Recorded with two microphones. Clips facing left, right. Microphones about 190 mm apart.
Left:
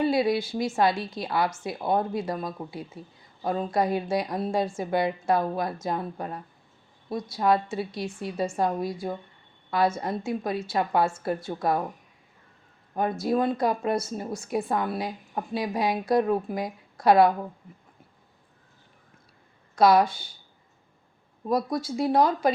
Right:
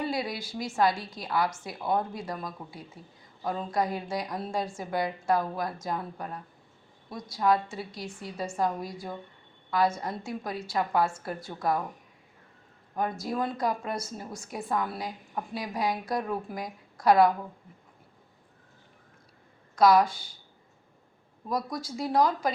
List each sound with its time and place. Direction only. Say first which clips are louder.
0.0 s speech: left 8 dB; 25° left (ahead or behind)
13.0 s speech: left 5 dB; 25° left (ahead or behind)
19.7 s speech: left 2 dB; 25° left (ahead or behind)
21.4 s speech: left 6 dB; 25° left (ahead or behind)